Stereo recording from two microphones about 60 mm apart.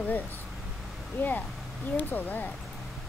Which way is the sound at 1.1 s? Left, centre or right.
Left.